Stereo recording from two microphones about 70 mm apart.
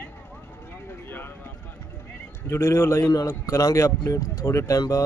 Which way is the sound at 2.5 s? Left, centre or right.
Left.